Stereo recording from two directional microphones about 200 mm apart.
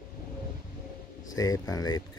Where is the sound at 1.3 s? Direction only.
15° left (ahead or behind).